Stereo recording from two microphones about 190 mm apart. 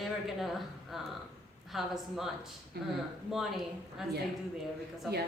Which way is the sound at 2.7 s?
55° right (ahead or behind).